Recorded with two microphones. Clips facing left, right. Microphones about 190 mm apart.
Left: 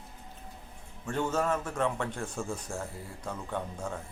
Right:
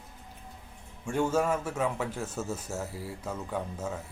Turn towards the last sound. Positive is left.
turn(degrees=-5)  # may be behind; listen again after turning